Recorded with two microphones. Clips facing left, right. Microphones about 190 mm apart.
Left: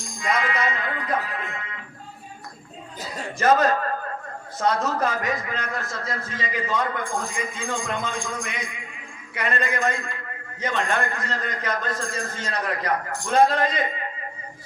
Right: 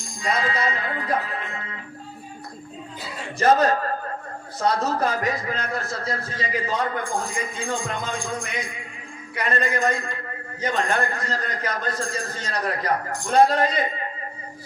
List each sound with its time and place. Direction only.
0.2 s a man's voice: 30° right (ahead or behind)
1.3 s music: 35° right (ahead or behind)
3.3 s a man's voice: 35° right (ahead or behind)